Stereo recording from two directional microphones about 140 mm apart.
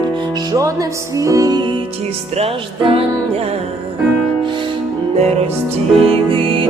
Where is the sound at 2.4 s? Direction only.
40° right (ahead or behind).